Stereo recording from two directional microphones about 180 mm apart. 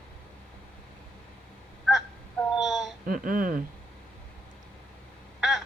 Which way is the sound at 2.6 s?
Centre (ahead or behind).